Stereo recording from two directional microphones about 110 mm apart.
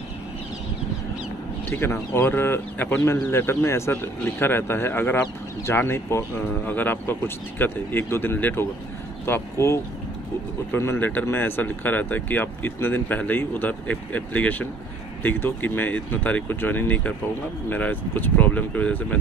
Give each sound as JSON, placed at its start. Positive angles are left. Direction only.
{"t": 1.7, "sound": "speech", "side_deg": 20}